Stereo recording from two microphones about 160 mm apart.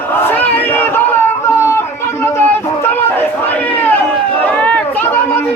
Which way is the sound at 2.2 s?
15° left (ahead or behind).